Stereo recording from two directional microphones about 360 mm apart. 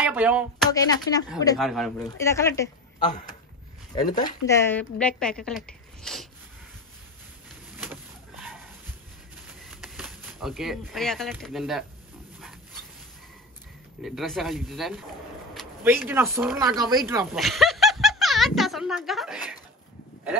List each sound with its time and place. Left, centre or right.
0.0 s speech: centre
1.4 s speech: centre
3.0 s speech: left; by 6.2 s centre
7.8 s a sound: centre
14.0 s speech: centre